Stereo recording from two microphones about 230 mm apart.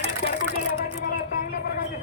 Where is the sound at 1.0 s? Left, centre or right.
Left.